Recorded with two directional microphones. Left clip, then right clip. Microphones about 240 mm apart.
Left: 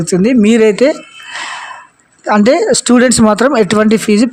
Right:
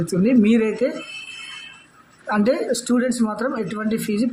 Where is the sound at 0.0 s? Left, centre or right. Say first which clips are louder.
Left 8 dB; left.